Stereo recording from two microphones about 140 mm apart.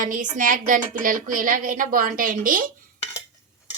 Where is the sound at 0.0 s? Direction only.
70° right (ahead or behind).